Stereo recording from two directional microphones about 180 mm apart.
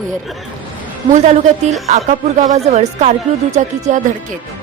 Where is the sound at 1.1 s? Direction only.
40° right (ahead or behind).